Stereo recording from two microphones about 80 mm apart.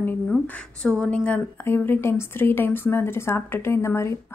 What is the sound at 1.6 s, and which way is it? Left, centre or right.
Speech, left.